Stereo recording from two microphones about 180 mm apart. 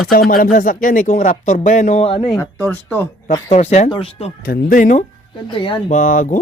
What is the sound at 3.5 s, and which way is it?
Speech, 40° left (ahead or behind).